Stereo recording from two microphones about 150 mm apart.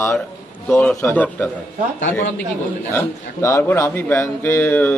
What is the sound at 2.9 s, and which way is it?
A man's voice, 15° left (ahead or behind).